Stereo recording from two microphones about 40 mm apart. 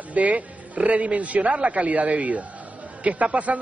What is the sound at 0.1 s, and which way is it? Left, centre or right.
A man's voice, right.